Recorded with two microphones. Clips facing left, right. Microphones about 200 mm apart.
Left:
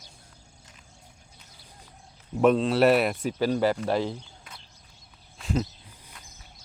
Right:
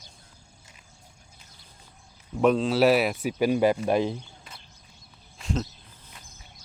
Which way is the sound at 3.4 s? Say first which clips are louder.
Right 2 dB; 15° right (ahead or behind).